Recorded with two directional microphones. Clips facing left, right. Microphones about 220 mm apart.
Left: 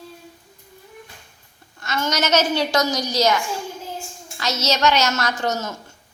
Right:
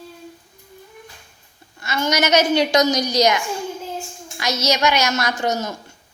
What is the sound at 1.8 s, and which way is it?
A woman's voice, 10° right (ahead or behind).